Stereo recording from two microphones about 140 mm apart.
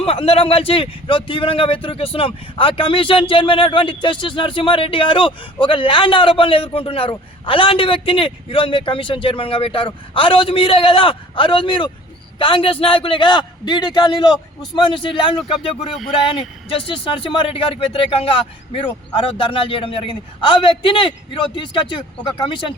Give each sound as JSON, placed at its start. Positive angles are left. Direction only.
{"t": 0.0, "sound": "speech", "side_deg": 45}